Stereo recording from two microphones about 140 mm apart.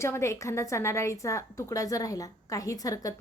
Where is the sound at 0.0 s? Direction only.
20° left (ahead or behind).